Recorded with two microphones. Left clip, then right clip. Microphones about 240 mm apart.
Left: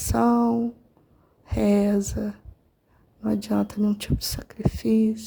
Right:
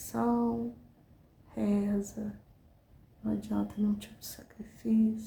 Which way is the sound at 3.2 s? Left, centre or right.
Left.